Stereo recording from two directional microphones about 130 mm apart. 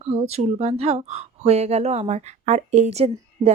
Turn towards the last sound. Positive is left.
turn(degrees=-55)  # may be behind; listen again after turning